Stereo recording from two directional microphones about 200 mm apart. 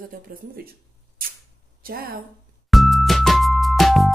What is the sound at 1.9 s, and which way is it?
Speech, 50° right (ahead or behind).